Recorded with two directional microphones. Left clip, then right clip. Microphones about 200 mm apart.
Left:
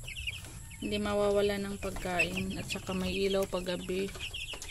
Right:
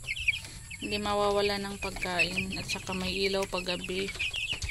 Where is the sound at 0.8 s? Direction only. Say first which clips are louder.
Right 2 dB; 10° left (ahead or behind).